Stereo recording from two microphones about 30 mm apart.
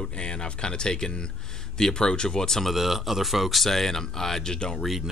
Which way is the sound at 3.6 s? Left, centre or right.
Centre.